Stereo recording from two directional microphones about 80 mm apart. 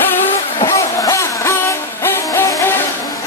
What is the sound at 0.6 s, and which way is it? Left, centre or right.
Music, left.